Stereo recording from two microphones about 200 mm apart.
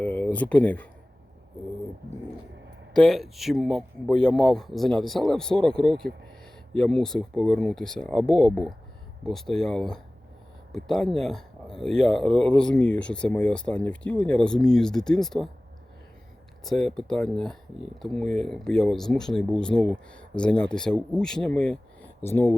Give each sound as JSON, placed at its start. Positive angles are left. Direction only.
{"t": 0.0, "sound": "a sound", "side_deg": 10}
{"t": 2.9, "sound": "speech", "side_deg": 0}
{"t": 16.6, "sound": "speech", "side_deg": 0}